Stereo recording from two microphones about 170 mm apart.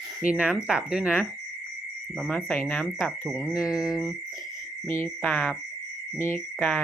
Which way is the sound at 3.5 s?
20° left (ahead or behind).